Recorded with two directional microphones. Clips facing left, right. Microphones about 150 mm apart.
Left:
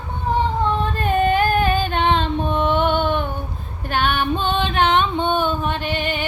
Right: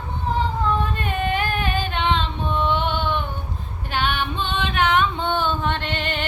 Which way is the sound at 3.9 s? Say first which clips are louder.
Left 4 dB; 50° left (ahead or behind).